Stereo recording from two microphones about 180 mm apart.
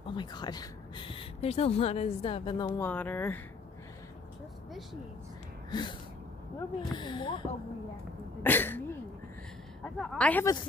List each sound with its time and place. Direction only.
0.1 s speech: 25° left (ahead or behind)
2.8 s speech: 10° left (ahead or behind)
5.7 s gasp: 25° left (ahead or behind)
6.8 s speech: 25° left (ahead or behind)
8.4 s speech: 10° left (ahead or behind)
9.9 s speech: 5° left (ahead or behind)